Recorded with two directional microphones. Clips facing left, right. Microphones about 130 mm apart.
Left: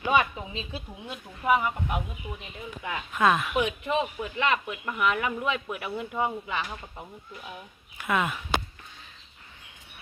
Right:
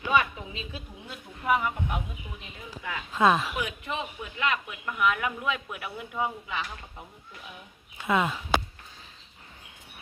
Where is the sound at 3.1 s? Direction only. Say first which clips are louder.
Right 1 dB; 25° right (ahead or behind).